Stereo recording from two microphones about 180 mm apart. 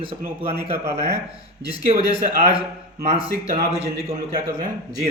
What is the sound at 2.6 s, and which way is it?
A man's voice, 35° right (ahead or behind).